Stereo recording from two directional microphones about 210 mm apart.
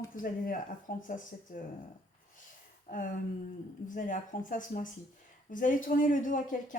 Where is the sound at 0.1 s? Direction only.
40° left (ahead or behind).